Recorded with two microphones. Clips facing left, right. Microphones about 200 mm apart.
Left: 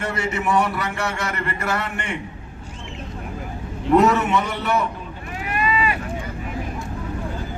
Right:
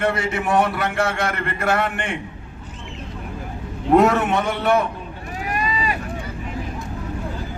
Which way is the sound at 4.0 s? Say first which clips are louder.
Even; 50° right (ahead or behind).